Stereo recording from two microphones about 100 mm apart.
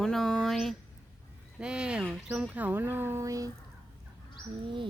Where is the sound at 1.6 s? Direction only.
10° right (ahead or behind); by 3.5 s 35° right (ahead or behind).